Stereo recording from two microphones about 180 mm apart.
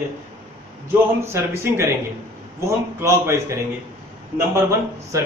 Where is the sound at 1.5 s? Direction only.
15° right (ahead or behind).